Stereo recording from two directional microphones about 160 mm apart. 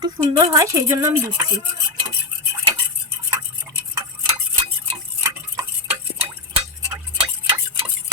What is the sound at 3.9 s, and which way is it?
Tick-tock, 30° right (ahead or behind).